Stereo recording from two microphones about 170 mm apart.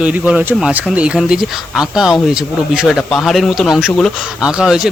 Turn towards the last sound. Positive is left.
turn(degrees=-5)  # may be behind; listen again after turning